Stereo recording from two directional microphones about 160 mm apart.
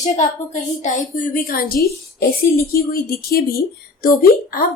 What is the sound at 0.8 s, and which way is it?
A woman's voice, 55° left (ahead or behind).